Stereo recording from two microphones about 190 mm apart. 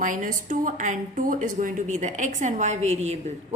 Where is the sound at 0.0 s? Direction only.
45° right (ahead or behind).